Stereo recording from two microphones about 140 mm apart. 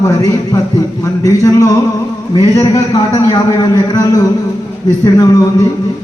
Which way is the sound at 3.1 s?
30° left (ahead or behind).